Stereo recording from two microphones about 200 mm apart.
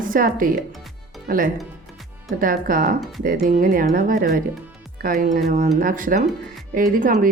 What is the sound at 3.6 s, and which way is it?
A woman's voice, 45° right (ahead or behind).